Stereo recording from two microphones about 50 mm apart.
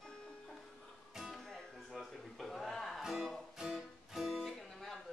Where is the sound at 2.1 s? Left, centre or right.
Centre.